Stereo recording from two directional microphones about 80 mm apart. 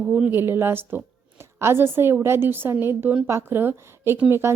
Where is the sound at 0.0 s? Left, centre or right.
Centre.